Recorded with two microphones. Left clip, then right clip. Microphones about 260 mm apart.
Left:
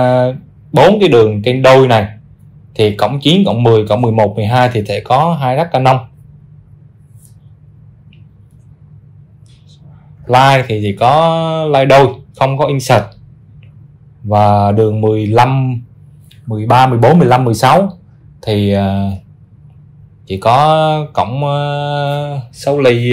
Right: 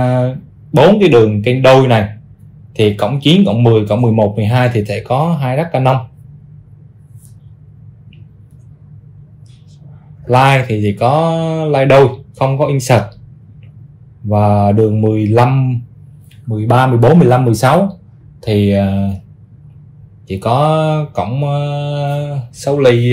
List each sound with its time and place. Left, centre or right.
0.0 s speech: left
10.2 s speech: left
14.3 s mantra: left
17.0 s mantra: left
20.2 s mantra: left